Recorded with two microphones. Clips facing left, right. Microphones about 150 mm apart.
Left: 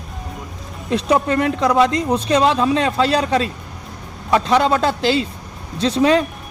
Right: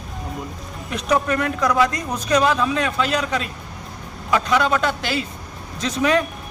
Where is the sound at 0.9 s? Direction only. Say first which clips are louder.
Left 4 dB; 30° left (ahead or behind).